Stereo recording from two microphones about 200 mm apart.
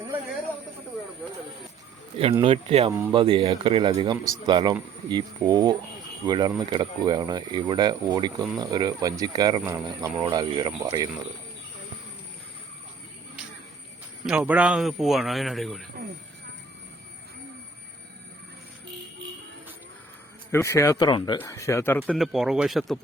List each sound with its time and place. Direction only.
2.4 s speech: 30° right (ahead or behind)
14.3 s a man's voice: 5° right (ahead or behind)
20.5 s speech: 15° left (ahead or behind)
22.0 s a man's voice: centre (ahead or behind)